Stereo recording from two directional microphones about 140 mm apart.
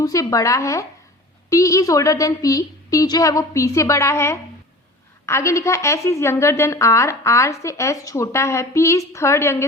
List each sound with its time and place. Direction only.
0.0 s a woman's voice: 25° left (ahead or behind)